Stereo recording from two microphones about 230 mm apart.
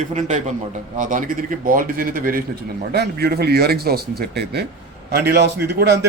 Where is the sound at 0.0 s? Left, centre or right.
Right.